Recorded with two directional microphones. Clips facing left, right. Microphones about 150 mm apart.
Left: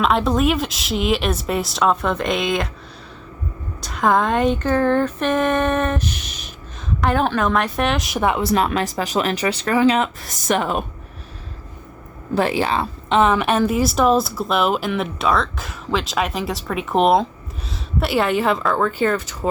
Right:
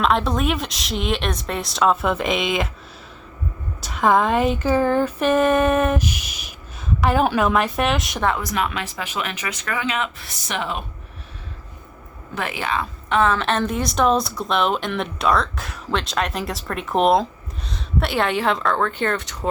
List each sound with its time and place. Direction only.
0.0 s a woman's voice: centre (ahead or behind)
3.8 s a woman's voice: centre (ahead or behind)
8.4 s speech: 35° left (ahead or behind)
12.3 s a woman's voice: 35° left (ahead or behind); by 19.5 s 5° left (ahead or behind)